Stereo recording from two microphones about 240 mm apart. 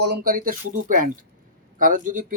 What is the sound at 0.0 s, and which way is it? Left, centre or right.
Speech, right.